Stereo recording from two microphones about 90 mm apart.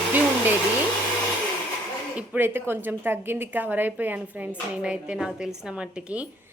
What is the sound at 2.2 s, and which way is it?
Speech, 20° right (ahead or behind).